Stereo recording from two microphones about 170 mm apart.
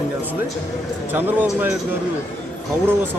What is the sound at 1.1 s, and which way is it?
Speech, 10° right (ahead or behind).